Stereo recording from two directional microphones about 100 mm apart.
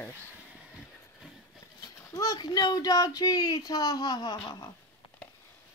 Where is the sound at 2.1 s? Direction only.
40° left (ahead or behind).